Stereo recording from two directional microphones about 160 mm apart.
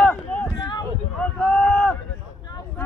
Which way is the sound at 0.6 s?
25° left (ahead or behind).